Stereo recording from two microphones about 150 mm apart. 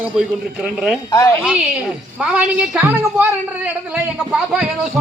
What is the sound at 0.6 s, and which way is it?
Speech, 5° right (ahead or behind).